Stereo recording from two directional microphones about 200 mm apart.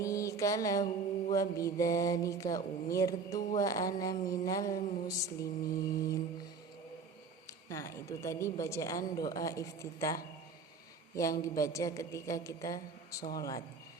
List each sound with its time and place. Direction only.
0.0 s mantra: 15° left (ahead or behind)
7.7 s mantra: 15° left (ahead or behind)